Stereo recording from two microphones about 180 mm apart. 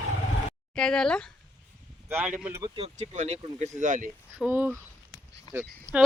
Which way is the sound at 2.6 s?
30° right (ahead or behind).